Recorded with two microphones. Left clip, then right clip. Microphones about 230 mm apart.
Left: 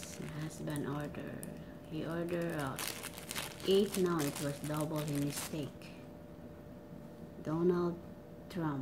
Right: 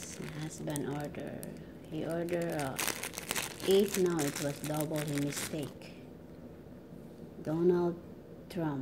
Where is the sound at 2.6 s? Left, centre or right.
Centre.